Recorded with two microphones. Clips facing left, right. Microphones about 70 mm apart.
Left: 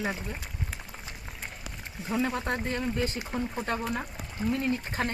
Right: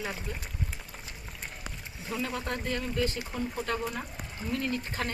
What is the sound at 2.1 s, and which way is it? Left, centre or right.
Speech, left.